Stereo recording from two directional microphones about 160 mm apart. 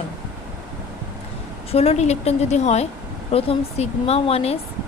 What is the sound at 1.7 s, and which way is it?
A woman's voice, 40° left (ahead or behind).